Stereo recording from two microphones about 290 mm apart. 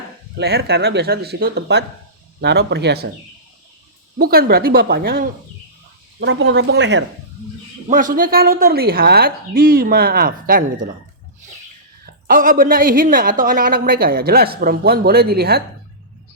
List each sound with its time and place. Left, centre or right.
0.3 s speech: right
4.2 s speech: right
7.9 s a woman's voice: right
12.0 s a woman's voice: right